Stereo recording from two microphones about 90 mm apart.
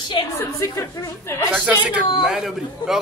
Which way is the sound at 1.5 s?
15° right (ahead or behind).